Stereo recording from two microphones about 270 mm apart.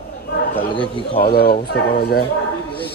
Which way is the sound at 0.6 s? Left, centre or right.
Centre.